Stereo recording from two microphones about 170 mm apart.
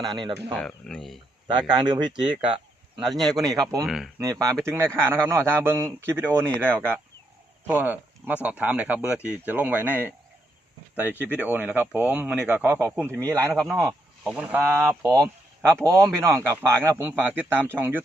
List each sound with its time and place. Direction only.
0.0 s speech: 25° right (ahead or behind)
0.5 s speech: 5° left (ahead or behind)
1.5 s speech: 25° right (ahead or behind)
3.0 s speech: centre (ahead or behind)
3.4 s speech: 20° right (ahead or behind)
3.8 s speech: centre (ahead or behind)
4.2 s speech: 20° right (ahead or behind)
11.3 s speech: 10° right (ahead or behind)
13.5 s speech: centre (ahead or behind)